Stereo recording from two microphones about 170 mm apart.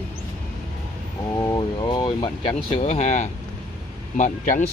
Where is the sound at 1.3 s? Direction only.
20° left (ahead or behind).